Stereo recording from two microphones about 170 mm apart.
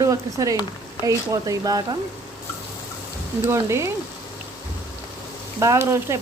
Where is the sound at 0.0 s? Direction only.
20° right (ahead or behind).